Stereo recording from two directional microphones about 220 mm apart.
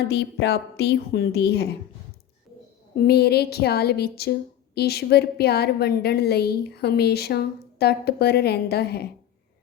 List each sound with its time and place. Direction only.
0.1 s a woman's voice: 50° left (ahead or behind)
3.1 s a woman's voice: 45° left (ahead or behind)